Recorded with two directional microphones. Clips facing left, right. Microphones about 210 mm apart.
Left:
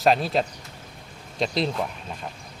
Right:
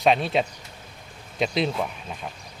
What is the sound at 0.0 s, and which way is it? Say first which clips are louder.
Speech: even; centre (ahead or behind).